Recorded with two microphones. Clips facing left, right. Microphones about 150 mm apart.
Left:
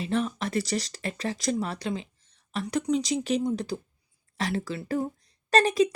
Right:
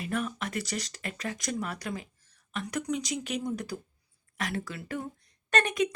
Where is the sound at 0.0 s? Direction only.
25° left (ahead or behind).